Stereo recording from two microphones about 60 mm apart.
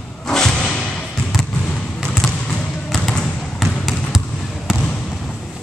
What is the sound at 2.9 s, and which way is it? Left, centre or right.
Basketball bounce, centre.